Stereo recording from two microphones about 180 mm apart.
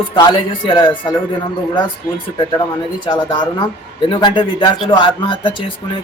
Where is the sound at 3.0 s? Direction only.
25° left (ahead or behind).